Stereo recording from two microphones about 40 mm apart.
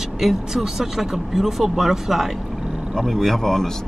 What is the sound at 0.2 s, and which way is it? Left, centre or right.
Speech, centre.